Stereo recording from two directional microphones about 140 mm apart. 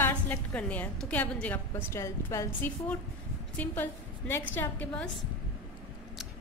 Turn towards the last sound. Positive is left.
turn(degrees=15)  # may be behind; listen again after turning